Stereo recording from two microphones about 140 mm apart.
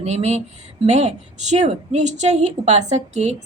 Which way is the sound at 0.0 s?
50° right (ahead or behind).